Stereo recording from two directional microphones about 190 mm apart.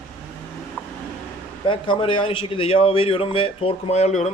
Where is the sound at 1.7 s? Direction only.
25° left (ahead or behind).